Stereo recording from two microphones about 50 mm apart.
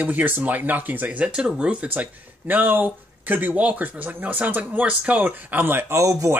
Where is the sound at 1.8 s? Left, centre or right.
Right.